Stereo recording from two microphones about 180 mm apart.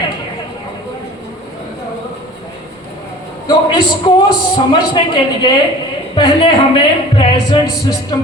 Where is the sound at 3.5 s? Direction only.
25° left (ahead or behind).